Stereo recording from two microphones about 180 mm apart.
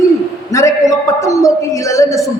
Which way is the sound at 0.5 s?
15° left (ahead or behind).